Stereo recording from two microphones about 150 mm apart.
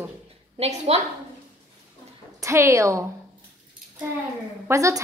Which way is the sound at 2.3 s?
20° right (ahead or behind).